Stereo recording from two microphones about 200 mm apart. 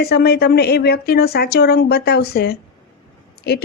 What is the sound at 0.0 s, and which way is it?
A woman's voice, 50° left (ahead or behind).